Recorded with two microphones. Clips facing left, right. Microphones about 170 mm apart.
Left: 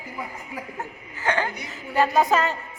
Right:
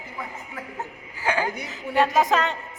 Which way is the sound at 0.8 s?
10° right (ahead or behind).